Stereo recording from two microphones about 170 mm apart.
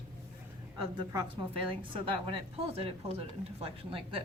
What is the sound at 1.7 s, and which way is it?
A woman's voice, 30° right (ahead or behind).